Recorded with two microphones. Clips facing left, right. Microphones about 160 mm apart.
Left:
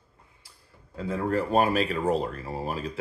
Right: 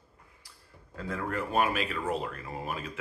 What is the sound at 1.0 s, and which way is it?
Speech, 25° left (ahead or behind).